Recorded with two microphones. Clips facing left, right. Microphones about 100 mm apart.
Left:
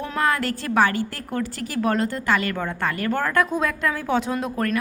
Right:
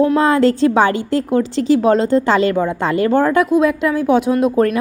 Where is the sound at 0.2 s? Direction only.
25° right (ahead or behind).